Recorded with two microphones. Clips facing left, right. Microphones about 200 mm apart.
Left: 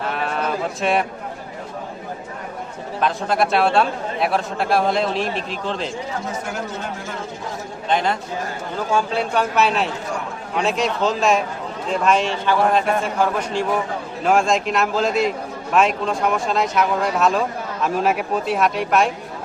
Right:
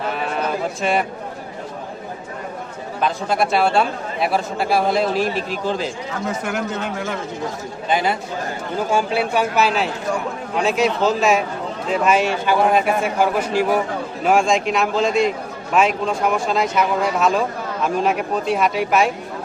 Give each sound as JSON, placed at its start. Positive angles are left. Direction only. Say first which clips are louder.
{"t": 0.0, "sound": "a sound", "louder": "right 1 dB", "side_deg": 0}
{"t": 3.0, "sound": "a man's voice", "louder": "even", "side_deg": 0}
{"t": 6.5, "sound": "speech", "louder": "right 4 dB", "side_deg": -75}
{"t": 7.9, "sound": "a man's voice", "louder": "right 1 dB", "side_deg": -5}